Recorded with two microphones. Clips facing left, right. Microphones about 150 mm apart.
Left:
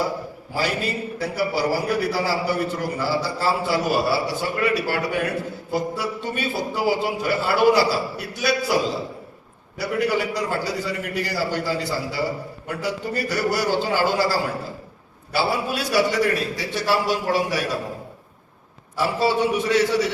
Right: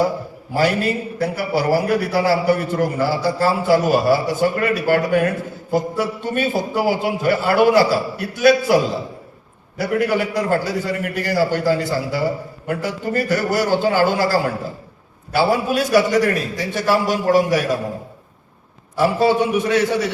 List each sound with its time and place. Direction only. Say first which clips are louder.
0.5 s a man's voice: right 7 dB; 50° right (ahead or behind)
9.7 s a man's voice: right 4 dB; 50° right (ahead or behind)
19.0 s a man's voice: right 4 dB; 50° right (ahead or behind)